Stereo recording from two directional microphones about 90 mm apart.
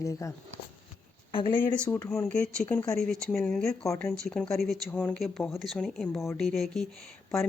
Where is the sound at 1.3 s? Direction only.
70° left (ahead or behind).